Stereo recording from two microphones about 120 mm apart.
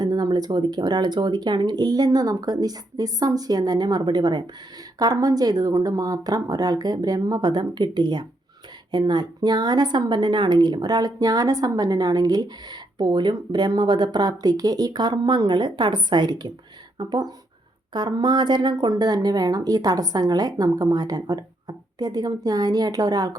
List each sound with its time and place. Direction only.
0.0 s a woman's voice: 35° right (ahead or behind)